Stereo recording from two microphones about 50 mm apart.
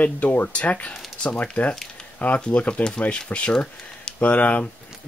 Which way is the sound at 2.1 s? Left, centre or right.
Left.